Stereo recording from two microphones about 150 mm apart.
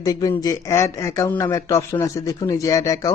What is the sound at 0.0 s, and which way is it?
Speech, 25° left (ahead or behind).